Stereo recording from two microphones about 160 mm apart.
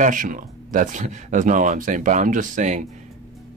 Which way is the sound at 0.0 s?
55° right (ahead or behind).